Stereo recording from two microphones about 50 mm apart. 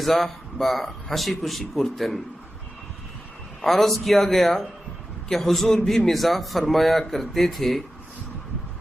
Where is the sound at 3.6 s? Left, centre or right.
Centre.